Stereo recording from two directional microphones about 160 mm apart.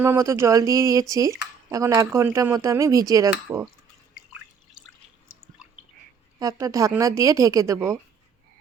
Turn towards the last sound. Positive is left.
turn(degrees=-20)  # may be behind; listen again after turning